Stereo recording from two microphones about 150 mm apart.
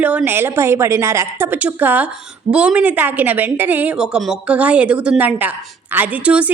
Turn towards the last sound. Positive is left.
turn(degrees=-10)  # may be behind; listen again after turning